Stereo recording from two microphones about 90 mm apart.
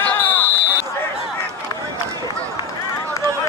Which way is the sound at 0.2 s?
20° left (ahead or behind).